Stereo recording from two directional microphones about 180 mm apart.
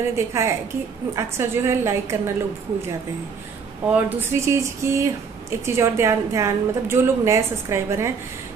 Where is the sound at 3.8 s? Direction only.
10° right (ahead or behind).